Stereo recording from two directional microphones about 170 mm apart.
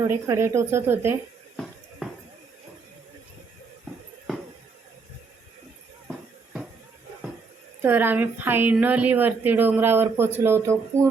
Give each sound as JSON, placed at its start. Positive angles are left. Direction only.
{"t": 0.0, "sound": "a woman's voice", "side_deg": -15}
{"t": 6.1, "sound": "a sound", "side_deg": -5}
{"t": 7.8, "sound": "a woman's voice", "side_deg": -10}